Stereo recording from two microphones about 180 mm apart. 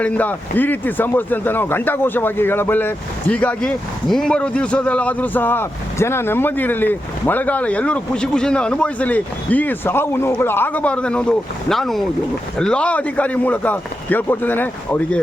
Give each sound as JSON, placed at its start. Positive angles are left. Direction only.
{"t": 0.0, "sound": "a man's voice", "side_deg": 10}